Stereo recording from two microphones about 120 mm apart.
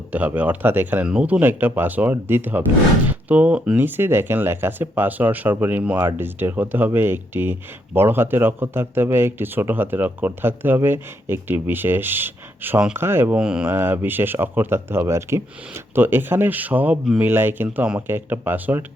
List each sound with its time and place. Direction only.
0.1 s speech: 15° right (ahead or behind)
13.4 s speech: 10° right (ahead or behind)